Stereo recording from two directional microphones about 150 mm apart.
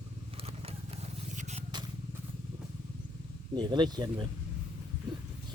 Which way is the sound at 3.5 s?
30° right (ahead or behind).